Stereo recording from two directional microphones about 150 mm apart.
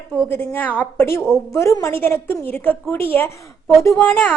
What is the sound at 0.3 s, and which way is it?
A woman's voice, 15° left (ahead or behind).